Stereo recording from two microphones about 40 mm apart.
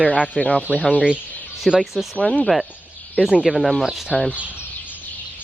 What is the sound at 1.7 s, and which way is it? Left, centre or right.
Speech, centre.